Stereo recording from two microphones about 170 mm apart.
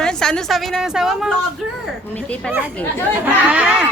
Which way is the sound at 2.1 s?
10° left (ahead or behind).